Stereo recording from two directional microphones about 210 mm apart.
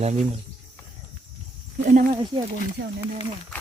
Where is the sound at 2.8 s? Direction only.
50° right (ahead or behind).